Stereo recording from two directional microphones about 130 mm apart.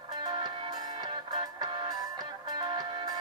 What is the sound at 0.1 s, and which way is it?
Music, 35° right (ahead or behind).